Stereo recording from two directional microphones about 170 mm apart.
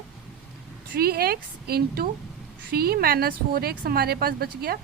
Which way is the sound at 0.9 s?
65° right (ahead or behind).